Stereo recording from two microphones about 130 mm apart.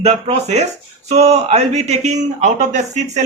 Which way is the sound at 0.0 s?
55° right (ahead or behind).